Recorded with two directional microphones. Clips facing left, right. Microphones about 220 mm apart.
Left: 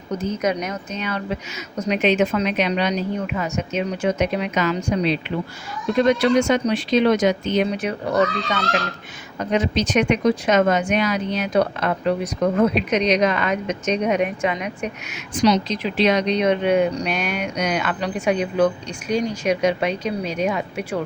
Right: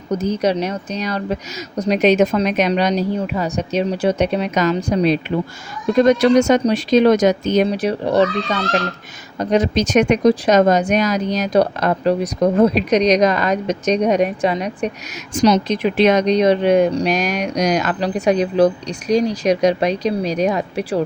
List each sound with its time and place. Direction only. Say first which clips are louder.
0.2 s speech: right 4 dB; 35° right (ahead or behind)